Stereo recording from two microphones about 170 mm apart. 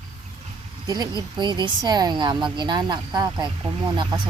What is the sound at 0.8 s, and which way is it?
Speech, 20° right (ahead or behind).